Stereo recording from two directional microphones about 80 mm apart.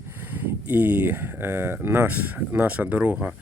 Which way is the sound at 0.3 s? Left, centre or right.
Right.